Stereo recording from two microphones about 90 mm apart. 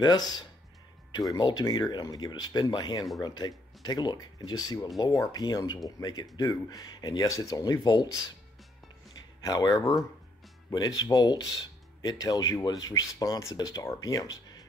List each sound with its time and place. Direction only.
0.0 s speech: 50° left (ahead or behind)
7.2 s speech: 40° left (ahead or behind)
9.4 s speech: 45° left (ahead or behind)
10.7 s speech: 45° left (ahead or behind)